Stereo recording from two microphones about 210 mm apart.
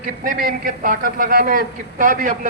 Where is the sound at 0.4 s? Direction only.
45° right (ahead or behind).